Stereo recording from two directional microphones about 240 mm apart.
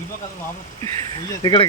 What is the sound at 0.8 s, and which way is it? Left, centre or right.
Speech, centre.